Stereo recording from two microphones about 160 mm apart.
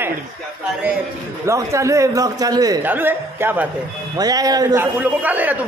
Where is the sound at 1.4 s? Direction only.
20° right (ahead or behind).